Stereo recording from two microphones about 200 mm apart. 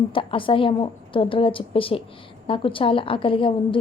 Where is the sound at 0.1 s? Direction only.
25° left (ahead or behind).